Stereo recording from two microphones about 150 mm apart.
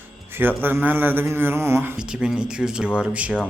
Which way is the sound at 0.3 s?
15° right (ahead or behind).